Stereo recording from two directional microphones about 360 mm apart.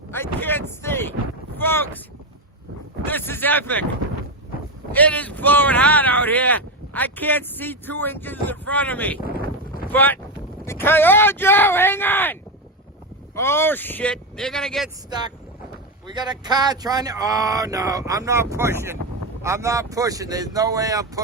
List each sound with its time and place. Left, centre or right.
0.3 s boat: centre
3.1 s a sound: centre
4.9 s speech: centre
9.2 s wind noise: left
9.9 s speech: centre
16.0 s speech: centre